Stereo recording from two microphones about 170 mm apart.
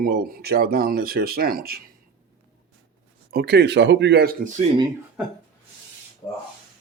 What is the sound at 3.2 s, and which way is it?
Speech, 70° right (ahead or behind).